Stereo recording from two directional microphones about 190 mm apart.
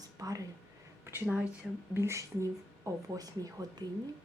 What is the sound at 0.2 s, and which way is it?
Speech, 20° right (ahead or behind).